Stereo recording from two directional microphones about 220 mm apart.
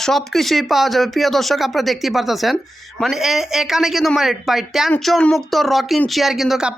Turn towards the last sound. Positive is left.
turn(degrees=0)  # may be behind; listen again after turning